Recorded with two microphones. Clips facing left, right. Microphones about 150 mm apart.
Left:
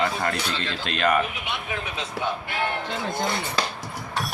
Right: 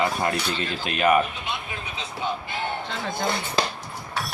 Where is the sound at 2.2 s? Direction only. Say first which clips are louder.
Left 1 dB; 80° left.